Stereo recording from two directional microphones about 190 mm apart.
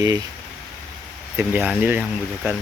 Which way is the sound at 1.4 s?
10° right (ahead or behind).